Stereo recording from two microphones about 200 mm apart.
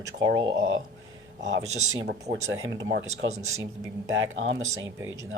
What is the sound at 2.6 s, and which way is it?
Speech, 65° right (ahead or behind).